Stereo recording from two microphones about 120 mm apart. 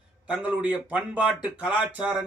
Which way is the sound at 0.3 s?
10° right (ahead or behind).